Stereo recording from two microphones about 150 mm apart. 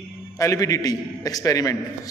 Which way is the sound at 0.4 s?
20° left (ahead or behind).